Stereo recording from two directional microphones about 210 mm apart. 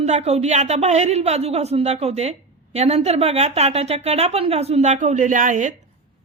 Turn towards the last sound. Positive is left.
turn(degrees=-40)  # may be behind; listen again after turning